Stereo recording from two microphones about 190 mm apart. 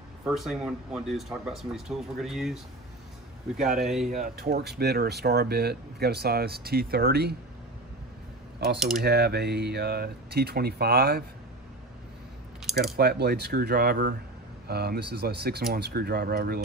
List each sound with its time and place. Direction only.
0.3 s speech: centre (ahead or behind)
4.4 s speech: 55° right (ahead or behind)
9.0 s speech: 60° right (ahead or behind)
12.9 s speech: 55° right (ahead or behind)